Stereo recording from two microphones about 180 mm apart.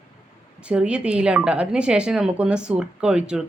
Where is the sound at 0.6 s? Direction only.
5° right (ahead or behind).